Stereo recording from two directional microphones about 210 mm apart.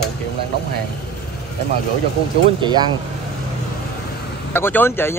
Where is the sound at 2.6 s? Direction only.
20° right (ahead or behind).